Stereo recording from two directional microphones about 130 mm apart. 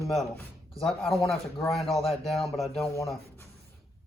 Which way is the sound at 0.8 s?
Centre (ahead or behind).